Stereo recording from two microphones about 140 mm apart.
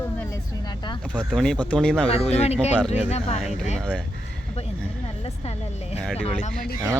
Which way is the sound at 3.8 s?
10° left (ahead or behind).